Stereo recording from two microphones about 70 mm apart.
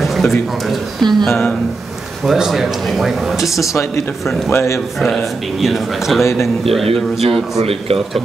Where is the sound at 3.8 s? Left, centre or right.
Left.